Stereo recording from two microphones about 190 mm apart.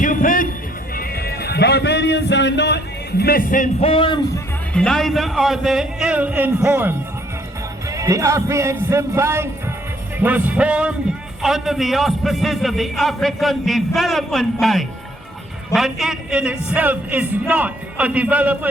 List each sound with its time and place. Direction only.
0.0 s music: 45° left (ahead or behind)
0.9 s speech: 55° left (ahead or behind); by 4.2 s 25° left (ahead or behind)
4.7 s a man's voice: 5° left (ahead or behind)